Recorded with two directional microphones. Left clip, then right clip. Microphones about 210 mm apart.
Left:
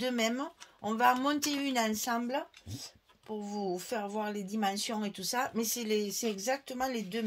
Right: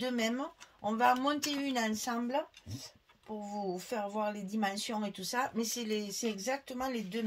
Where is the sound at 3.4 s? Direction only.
35° left (ahead or behind).